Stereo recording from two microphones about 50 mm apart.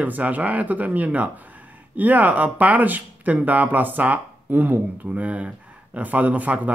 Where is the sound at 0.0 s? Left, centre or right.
Right.